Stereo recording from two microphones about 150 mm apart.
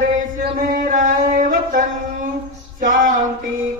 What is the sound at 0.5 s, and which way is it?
Singing, 75° right (ahead or behind).